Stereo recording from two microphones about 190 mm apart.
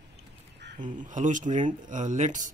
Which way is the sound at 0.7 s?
40° right (ahead or behind).